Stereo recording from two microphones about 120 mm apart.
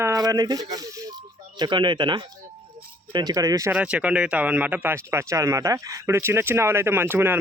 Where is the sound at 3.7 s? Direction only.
10° right (ahead or behind).